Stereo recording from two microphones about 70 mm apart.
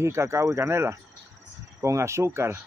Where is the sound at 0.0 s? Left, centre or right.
Right.